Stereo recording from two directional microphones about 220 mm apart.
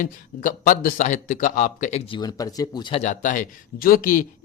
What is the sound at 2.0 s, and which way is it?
Speech, 20° left (ahead or behind).